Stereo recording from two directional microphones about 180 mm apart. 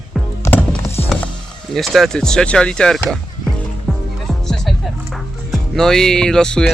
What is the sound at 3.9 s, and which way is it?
Music, centre (ahead or behind).